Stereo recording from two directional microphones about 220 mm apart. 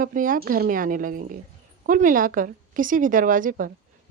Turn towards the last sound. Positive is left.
turn(degrees=-40)  # may be behind; listen again after turning